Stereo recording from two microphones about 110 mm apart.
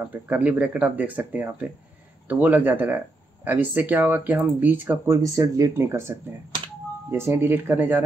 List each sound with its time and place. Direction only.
0.0 s speech: 15° right (ahead or behind)